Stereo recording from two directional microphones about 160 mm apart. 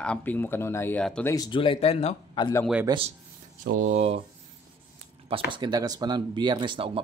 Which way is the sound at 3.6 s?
55° right (ahead or behind).